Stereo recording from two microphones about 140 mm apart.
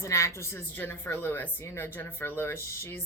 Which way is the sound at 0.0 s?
20° left (ahead or behind).